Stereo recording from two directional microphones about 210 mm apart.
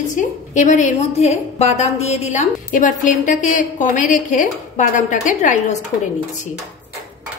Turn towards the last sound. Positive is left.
turn(degrees=35)  # may be behind; listen again after turning